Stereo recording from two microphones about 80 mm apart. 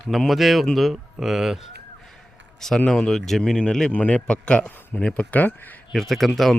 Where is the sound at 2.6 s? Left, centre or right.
Centre.